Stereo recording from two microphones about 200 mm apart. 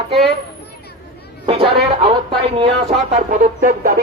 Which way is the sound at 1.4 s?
30° right (ahead or behind).